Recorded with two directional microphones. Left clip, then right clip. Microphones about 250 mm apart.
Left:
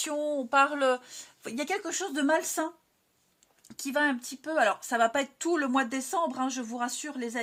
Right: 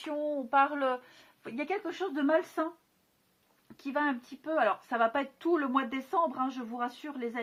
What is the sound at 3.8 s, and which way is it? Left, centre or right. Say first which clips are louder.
Speech: left 4 dB; left.